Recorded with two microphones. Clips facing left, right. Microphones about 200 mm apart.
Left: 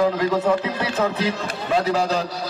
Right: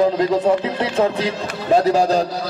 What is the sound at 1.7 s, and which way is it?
Speech, 40° right (ahead or behind).